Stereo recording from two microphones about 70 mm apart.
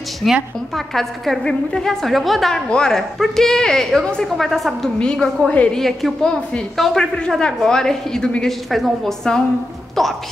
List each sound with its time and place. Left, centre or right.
0.2 s a woman's voice: centre
4.9 s a woman's voice: centre
5.8 s a woman's voice: centre
10.0 s a sound: centre